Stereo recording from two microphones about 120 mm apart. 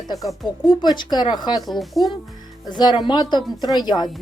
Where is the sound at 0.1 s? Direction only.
30° left (ahead or behind).